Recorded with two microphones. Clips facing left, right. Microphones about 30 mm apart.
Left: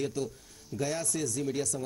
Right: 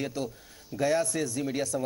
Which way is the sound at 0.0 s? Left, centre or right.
Right.